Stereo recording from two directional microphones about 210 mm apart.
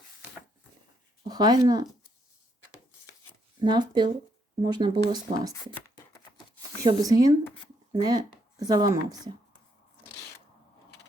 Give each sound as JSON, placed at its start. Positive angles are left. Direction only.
{"t": 1.3, "sound": "speech", "side_deg": -20}
{"t": 3.6, "sound": "speech", "side_deg": -20}